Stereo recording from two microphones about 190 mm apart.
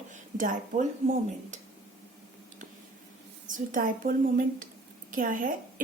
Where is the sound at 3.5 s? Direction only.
45° right (ahead or behind).